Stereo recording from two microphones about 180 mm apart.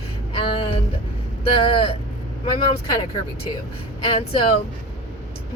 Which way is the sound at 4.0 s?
30° left (ahead or behind).